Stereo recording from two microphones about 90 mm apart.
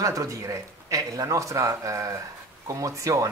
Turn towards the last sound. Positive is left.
turn(degrees=-35)  # may be behind; listen again after turning